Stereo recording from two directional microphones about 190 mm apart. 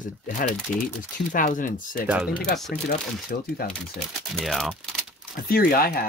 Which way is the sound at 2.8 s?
50° left (ahead or behind).